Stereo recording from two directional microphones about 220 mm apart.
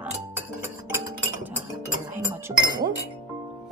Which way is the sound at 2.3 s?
15° right (ahead or behind).